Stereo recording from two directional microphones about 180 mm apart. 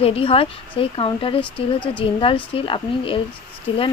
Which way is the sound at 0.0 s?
30° left (ahead or behind).